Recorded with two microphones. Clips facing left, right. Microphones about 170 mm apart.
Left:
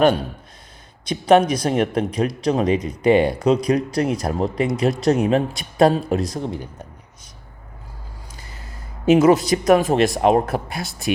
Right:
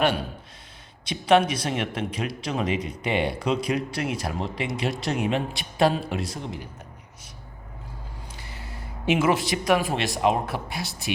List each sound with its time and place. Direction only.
1.0 s speech: 40° left (ahead or behind)
8.4 s speech: 40° left (ahead or behind)